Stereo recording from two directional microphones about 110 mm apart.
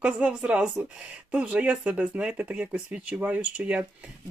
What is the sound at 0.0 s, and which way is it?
A woman's voice, 10° right (ahead or behind).